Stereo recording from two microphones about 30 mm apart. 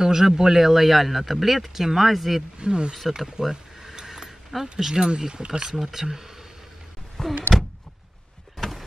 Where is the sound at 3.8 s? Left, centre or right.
Centre.